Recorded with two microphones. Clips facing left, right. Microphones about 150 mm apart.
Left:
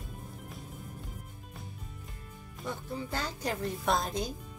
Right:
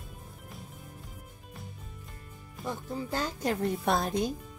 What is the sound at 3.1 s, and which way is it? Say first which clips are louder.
A woman's voice: right 5 dB; 45° right (ahead or behind).